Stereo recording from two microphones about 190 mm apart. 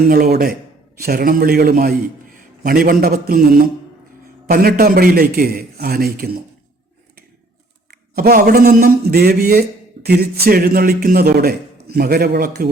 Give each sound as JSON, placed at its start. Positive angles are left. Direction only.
{"t": 0.1, "sound": "a man's voice", "side_deg": -50}
{"t": 4.4, "sound": "a man's voice", "side_deg": -50}
{"t": 7.9, "sound": "a man's voice", "side_deg": -55}